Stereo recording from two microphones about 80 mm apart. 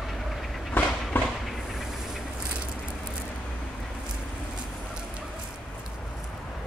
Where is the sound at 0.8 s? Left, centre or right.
Left.